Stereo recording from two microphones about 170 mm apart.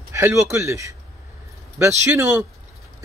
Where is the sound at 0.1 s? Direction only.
15° right (ahead or behind).